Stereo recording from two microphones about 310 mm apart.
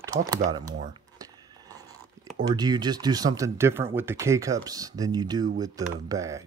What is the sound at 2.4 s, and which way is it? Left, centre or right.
Speech, centre.